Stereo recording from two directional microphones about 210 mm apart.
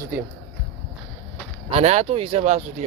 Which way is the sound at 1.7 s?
30° right (ahead or behind).